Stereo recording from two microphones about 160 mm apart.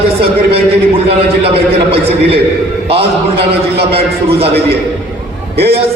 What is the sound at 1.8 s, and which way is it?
Speech, 35° right (ahead or behind).